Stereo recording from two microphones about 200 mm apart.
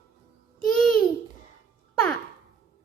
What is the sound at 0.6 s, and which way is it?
Babbling, 5° left (ahead or behind).